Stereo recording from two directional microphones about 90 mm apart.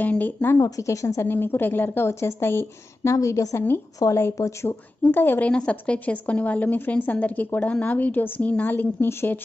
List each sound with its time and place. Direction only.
0.0 s a woman's voice: 20° left (ahead or behind)
0.6 s a woman's voice: 40° left (ahead or behind); by 5.5 s 20° left (ahead or behind)
5.5 s a woman's voice: 10° left (ahead or behind)